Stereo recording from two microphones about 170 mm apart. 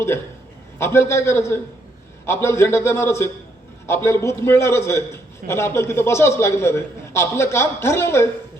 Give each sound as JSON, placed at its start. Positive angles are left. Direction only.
{"t": 0.8, "sound": "a man's voice", "side_deg": 15}